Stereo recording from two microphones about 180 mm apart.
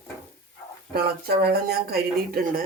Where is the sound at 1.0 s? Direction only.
60° right (ahead or behind).